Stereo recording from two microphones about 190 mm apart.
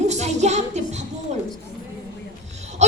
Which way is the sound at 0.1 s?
35° right (ahead or behind).